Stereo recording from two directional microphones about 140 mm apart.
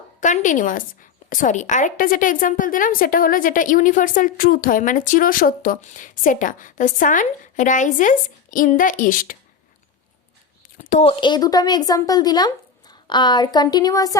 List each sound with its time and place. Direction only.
0.2 s a woman's voice: 65° left (ahead or behind)
10.8 s a sound: 65° left (ahead or behind)
11.0 s speech: 35° left (ahead or behind)